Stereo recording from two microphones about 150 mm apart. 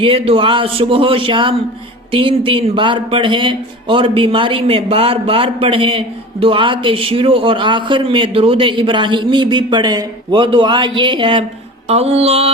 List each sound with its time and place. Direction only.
0.0 s a man's voice: 35° right (ahead or behind)
11.9 s mantra: 45° right (ahead or behind)